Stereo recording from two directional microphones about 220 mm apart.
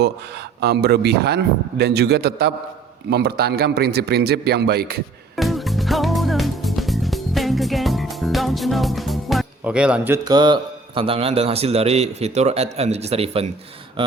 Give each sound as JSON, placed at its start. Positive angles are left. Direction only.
{"t": 0.6, "sound": "a man's voice", "side_deg": -45}
{"t": 5.4, "sound": "music", "side_deg": 0}